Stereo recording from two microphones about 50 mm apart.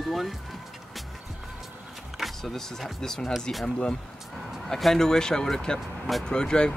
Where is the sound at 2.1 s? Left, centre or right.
Centre.